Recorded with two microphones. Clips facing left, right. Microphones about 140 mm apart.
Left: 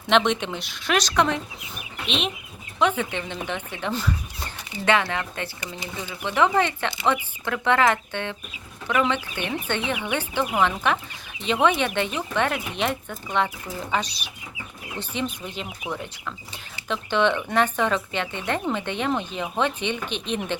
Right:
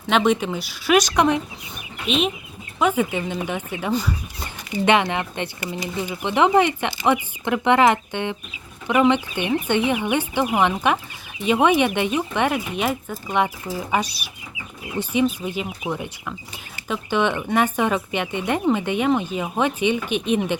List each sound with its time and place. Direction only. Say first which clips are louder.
0.1 s speech: right 2 dB; 5° right (ahead or behind)
2.0 s speech: right 6 dB; 5° right (ahead or behind)
4.9 s speech: right 3 dB; 20° right (ahead or behind)
16.9 s speech: right 1 dB; 10° right (ahead or behind)